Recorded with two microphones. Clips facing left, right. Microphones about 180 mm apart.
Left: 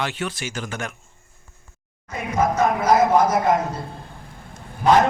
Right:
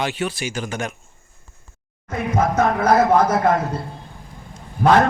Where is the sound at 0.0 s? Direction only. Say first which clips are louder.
Right 3 dB; 15° right (ahead or behind).